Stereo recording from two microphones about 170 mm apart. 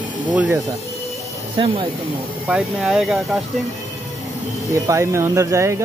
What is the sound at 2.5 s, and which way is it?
Speech, 5° right (ahead or behind).